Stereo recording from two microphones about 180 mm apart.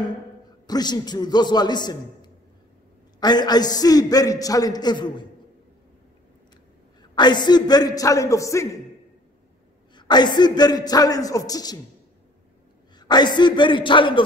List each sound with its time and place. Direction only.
0.7 s a man's voice: 20° left (ahead or behind)
7.0 s a man's voice: 25° left (ahead or behind)
9.9 s a man's voice: 25° left (ahead or behind)
13.0 s a man's voice: 25° left (ahead or behind)